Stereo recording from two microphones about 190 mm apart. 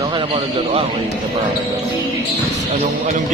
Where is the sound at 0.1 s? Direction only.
25° right (ahead or behind).